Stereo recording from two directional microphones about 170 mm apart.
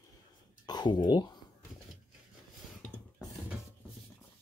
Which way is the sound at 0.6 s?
25° left (ahead or behind).